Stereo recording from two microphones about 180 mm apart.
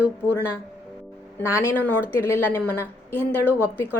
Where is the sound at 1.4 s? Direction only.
15° left (ahead or behind).